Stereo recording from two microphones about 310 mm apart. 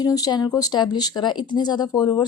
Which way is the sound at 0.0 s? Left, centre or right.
Centre.